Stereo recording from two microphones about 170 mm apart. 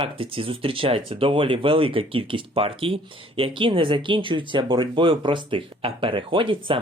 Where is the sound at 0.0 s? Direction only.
30° right (ahead or behind).